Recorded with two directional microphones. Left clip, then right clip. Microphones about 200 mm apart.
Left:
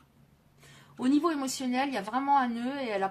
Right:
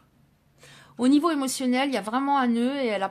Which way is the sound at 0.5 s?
50° right (ahead or behind).